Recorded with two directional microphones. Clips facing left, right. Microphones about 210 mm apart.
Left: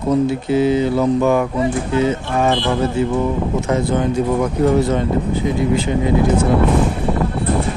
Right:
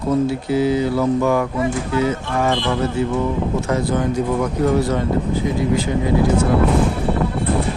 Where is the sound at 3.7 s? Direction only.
25° left (ahead or behind).